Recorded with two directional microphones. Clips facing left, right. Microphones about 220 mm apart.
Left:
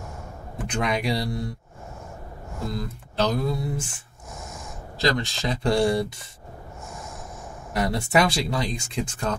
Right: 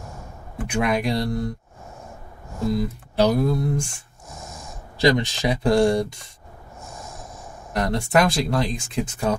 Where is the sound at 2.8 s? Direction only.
10° right (ahead or behind).